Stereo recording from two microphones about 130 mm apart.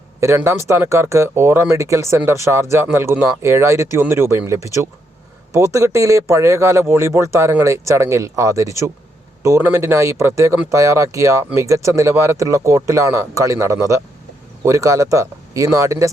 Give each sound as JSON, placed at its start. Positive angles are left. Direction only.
{"t": 0.2, "sound": "speech", "side_deg": -20}